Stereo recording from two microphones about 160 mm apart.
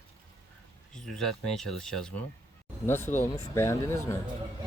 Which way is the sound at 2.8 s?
15° left (ahead or behind).